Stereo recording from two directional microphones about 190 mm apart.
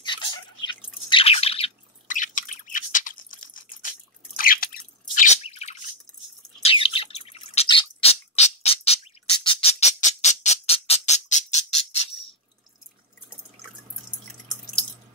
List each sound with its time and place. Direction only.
0.0 s drip: 25° left (ahead or behind)
1.0 s bird: 30° left (ahead or behind)
2.0 s a sound: 45° left (ahead or behind)
4.4 s drip: 50° left (ahead or behind)
5.1 s drip: 40° left (ahead or behind)
6.6 s bird: 30° left (ahead or behind)